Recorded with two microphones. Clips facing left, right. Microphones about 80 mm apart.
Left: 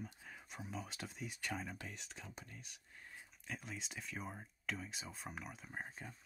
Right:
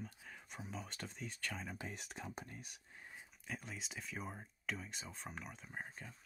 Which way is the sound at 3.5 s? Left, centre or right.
Centre.